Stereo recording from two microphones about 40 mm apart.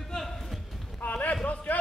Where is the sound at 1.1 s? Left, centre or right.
Left.